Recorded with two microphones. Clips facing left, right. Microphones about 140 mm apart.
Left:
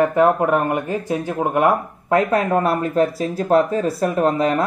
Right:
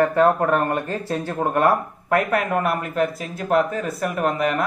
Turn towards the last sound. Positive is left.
turn(degrees=30)  # may be behind; listen again after turning